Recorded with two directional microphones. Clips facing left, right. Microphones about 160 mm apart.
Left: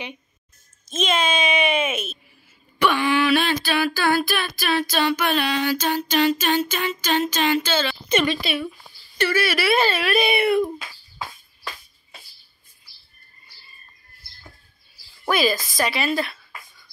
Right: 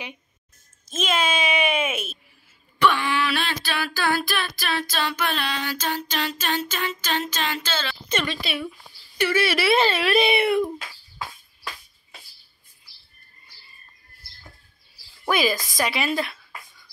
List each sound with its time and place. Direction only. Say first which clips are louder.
0.8 s a child's voice: left 2 dB; 5° right (ahead or behind)
2.8 s a sound: left 2 dB; 10° left (ahead or behind)
8.4 s a child's voice: left 3 dB; centre (ahead or behind)
9.2 s speech: even; 25° right (ahead or behind)
15.2 s speech: left 1 dB; 15° right (ahead or behind)